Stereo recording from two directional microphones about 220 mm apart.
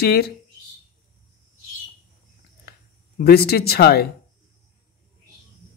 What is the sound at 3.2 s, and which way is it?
Speech, 45° left (ahead or behind).